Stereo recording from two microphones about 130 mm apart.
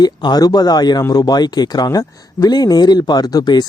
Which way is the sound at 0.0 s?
30° left (ahead or behind).